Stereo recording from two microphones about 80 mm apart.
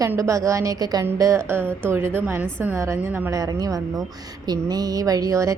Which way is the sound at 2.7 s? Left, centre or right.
Right.